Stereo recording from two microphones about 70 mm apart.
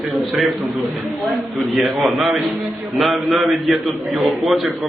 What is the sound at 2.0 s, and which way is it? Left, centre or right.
A man's voice, centre.